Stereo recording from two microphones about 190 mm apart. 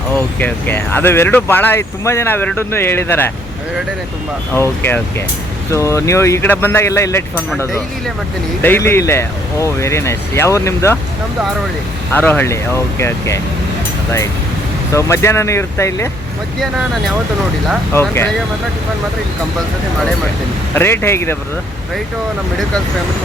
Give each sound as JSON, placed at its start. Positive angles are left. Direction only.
{"t": 0.2, "sound": "speech", "side_deg": 10}
{"t": 4.5, "sound": "speech", "side_deg": 10}
{"t": 8.6, "sound": "speech", "side_deg": 10}
{"t": 12.1, "sound": "speech", "side_deg": 10}
{"t": 14.9, "sound": "speech", "side_deg": 15}
{"t": 16.6, "sound": "speech", "side_deg": 0}
{"t": 17.9, "sound": "speech", "side_deg": 10}
{"t": 20.7, "sound": "speech", "side_deg": 10}